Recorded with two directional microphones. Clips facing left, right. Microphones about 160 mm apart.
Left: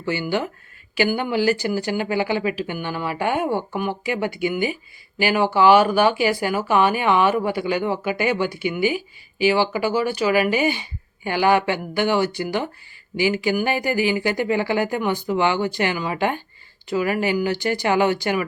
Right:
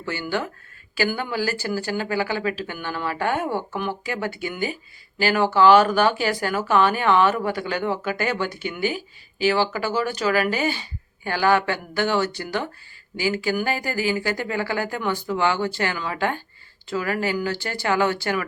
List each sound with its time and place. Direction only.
0.0 s speech: 15° left (ahead or behind)